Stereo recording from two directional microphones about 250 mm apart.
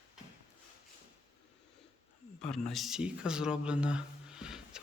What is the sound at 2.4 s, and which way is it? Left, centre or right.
Speech, centre.